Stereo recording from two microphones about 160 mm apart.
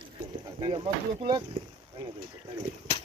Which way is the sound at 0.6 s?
30° right (ahead or behind).